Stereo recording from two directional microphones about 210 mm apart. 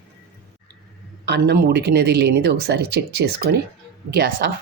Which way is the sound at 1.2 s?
55° right (ahead or behind).